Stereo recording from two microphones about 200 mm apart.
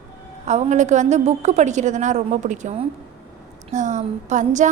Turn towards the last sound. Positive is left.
turn(degrees=-40)  # may be behind; listen again after turning